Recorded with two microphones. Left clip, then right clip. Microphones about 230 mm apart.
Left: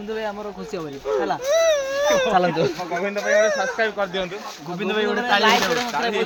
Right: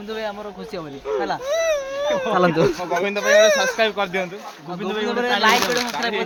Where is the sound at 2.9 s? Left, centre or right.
Right.